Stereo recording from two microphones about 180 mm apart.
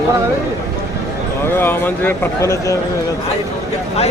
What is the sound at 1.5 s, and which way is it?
Speech, 10° left (ahead or behind).